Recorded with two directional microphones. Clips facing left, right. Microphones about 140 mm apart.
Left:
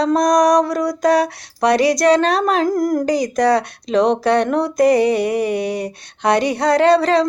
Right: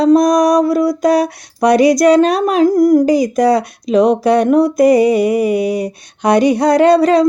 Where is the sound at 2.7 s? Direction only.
45° left (ahead or behind).